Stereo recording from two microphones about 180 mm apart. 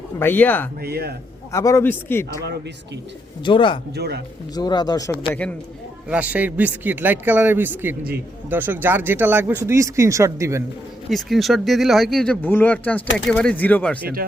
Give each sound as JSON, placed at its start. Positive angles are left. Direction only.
{"t": 0.2, "sound": "a man's voice", "side_deg": 10}
{"t": 0.8, "sound": "speech", "side_deg": -60}
{"t": 1.5, "sound": "a man's voice", "side_deg": 15}
{"t": 3.4, "sound": "speech", "side_deg": 25}
{"t": 3.9, "sound": "speech", "side_deg": -65}
{"t": 4.5, "sound": "speech", "side_deg": 20}
{"t": 6.1, "sound": "a man's voice", "side_deg": -5}
{"t": 11.1, "sound": "speech", "side_deg": 0}